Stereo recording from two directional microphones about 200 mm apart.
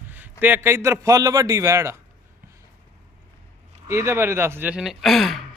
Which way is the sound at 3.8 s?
15° right (ahead or behind).